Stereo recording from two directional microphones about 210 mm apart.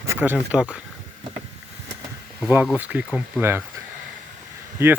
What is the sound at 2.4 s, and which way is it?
Speech, 5° right (ahead or behind).